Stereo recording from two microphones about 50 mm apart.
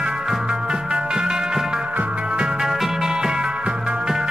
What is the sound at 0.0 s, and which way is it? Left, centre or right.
Music, centre.